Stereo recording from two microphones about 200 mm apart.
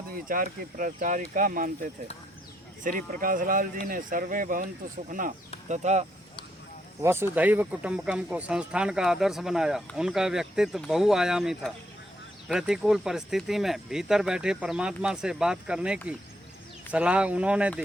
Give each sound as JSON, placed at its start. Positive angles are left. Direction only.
{"t": 0.3, "sound": "speech", "side_deg": -45}
{"t": 7.0, "sound": "speech", "side_deg": -10}